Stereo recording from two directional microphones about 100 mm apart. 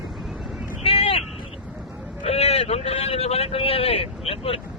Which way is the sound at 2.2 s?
90° left.